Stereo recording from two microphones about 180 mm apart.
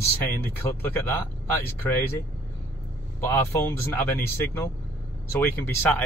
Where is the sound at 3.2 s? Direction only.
15° left (ahead or behind).